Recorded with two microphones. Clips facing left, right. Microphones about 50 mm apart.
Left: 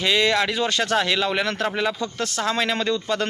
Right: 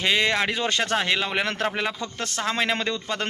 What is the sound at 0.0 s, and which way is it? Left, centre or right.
Speech, right.